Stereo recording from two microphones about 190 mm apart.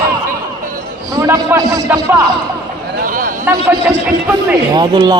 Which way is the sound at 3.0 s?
45° right (ahead or behind).